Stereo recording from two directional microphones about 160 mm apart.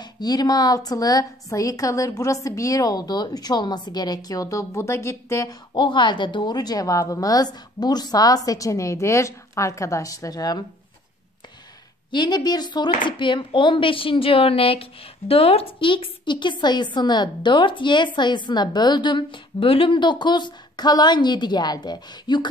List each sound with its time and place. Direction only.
0.0 s a woman's voice: 25° left (ahead or behind)
12.1 s a woman's voice: 25° left (ahead or behind)